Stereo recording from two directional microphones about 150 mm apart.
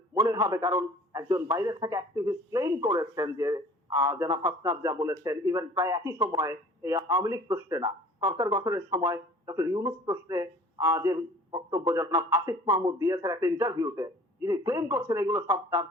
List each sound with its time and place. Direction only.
0.1 s a man's voice: 20° right (ahead or behind)